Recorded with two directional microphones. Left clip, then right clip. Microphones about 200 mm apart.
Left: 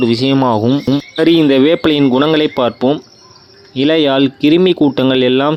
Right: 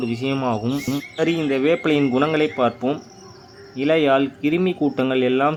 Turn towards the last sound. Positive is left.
turn(degrees=40)  # may be behind; listen again after turning